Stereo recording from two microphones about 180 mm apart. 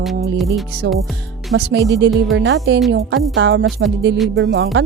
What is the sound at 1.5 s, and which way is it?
Speech, 90° right.